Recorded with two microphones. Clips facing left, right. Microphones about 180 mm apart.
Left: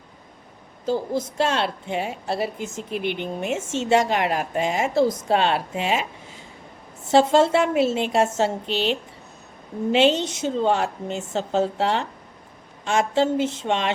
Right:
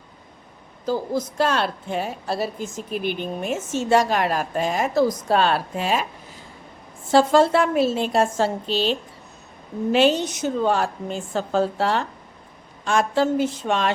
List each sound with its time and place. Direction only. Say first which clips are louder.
1.1 s a woman's voice: right 1 dB; 25° left (ahead or behind)
7.1 s a woman's voice: even; 25° left (ahead or behind)